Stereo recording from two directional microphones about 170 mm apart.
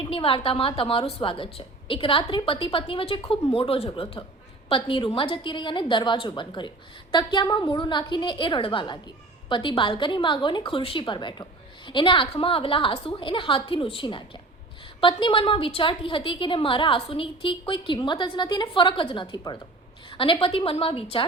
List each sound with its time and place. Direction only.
0.0 s a woman's voice: 30° left (ahead or behind)